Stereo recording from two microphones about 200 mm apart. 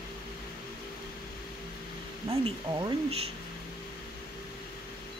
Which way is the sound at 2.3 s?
20° right (ahead or behind).